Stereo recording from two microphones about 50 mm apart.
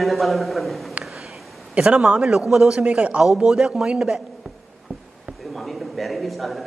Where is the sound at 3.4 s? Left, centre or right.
Centre.